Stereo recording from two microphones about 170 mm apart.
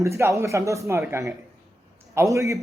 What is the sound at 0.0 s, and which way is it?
A man's voice, 15° right (ahead or behind).